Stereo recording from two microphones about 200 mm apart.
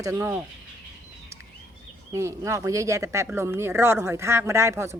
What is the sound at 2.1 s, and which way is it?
Speech, 15° right (ahead or behind).